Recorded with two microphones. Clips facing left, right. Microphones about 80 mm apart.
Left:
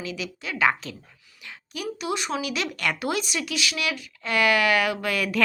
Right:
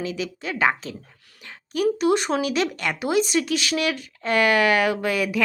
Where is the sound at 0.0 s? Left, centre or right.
Right.